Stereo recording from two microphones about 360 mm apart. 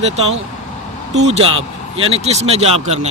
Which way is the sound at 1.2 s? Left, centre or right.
Centre.